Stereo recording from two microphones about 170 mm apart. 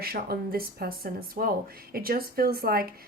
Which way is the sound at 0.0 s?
65° right (ahead or behind).